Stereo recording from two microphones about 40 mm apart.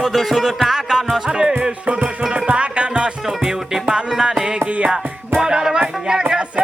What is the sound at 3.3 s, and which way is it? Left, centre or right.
Music, centre.